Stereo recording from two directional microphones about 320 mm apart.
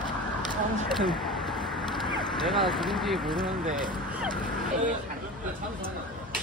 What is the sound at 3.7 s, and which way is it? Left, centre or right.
Speech, centre.